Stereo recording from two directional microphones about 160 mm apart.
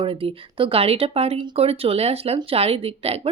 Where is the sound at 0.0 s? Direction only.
35° right (ahead or behind).